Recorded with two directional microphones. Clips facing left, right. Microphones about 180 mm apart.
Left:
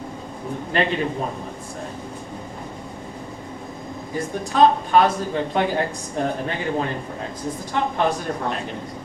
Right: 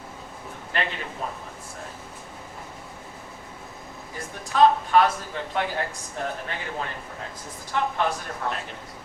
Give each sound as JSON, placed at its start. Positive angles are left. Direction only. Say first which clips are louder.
{"t": 0.7, "sound": "a woman's voice", "louder": "left 8 dB", "side_deg": 25}
{"t": 4.5, "sound": "a woman's voice", "louder": "left 2 dB", "side_deg": 25}